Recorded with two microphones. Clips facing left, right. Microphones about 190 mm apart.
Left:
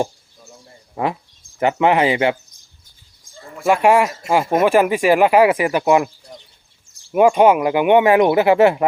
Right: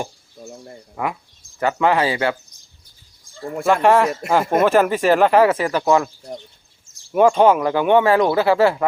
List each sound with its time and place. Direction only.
0.9 s speech: 25° left (ahead or behind)
3.7 s speech: 10° left (ahead or behind)
7.1 s speech: 10° left (ahead or behind)